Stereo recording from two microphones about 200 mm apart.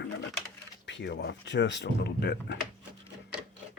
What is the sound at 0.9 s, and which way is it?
Speech, 65° left (ahead or behind).